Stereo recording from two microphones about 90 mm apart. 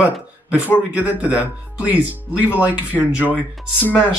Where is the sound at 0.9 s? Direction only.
20° right (ahead or behind).